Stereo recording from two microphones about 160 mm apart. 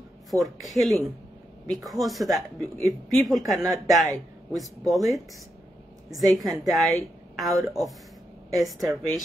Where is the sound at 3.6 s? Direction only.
20° right (ahead or behind).